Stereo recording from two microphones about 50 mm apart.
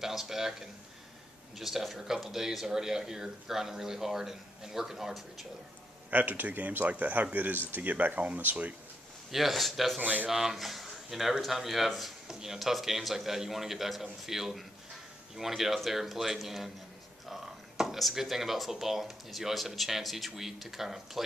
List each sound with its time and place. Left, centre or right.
0.0 s speech: centre
6.0 s speech: right
9.3 s speech: centre